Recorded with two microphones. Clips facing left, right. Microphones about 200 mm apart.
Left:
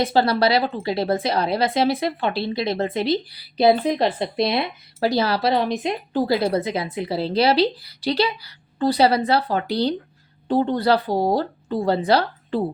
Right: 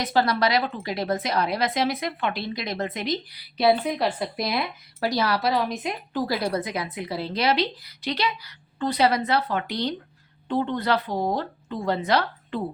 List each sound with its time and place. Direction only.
0.0 s a woman's voice: 30° left (ahead or behind)